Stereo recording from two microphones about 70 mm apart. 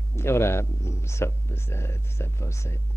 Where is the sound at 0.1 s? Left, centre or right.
Left.